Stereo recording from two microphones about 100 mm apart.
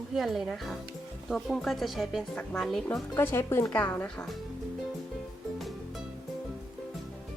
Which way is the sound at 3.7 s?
15° left (ahead or behind).